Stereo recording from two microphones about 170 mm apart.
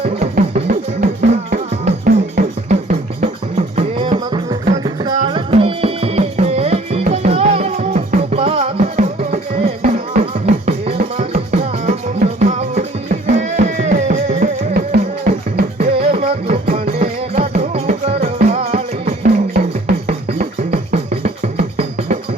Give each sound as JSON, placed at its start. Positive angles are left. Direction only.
{"t": 0.0, "sound": "music", "side_deg": -40}
{"t": 3.8, "sound": "music", "side_deg": -30}
{"t": 15.8, "sound": "music", "side_deg": -35}